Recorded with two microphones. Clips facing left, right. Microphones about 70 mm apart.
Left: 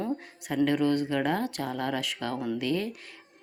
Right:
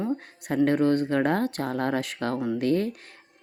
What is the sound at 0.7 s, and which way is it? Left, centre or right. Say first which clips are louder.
Speech: right 4 dB; right.